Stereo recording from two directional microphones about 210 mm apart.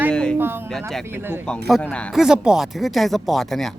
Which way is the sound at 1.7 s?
5° left (ahead or behind).